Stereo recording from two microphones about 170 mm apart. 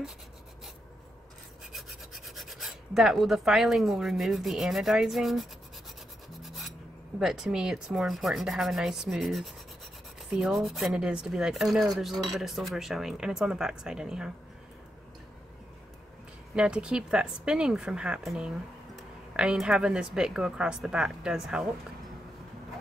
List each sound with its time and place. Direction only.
1.7 s filing: centre (ahead or behind)
6.4 s rub: centre (ahead or behind)
7.2 s speech: 5° right (ahead or behind)
16.5 s speech: 5° right (ahead or behind)